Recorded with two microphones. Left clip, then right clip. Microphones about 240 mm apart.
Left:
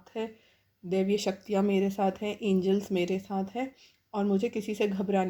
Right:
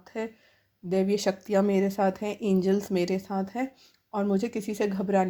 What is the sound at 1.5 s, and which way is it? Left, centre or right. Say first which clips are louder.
Speech: right 3 dB; right.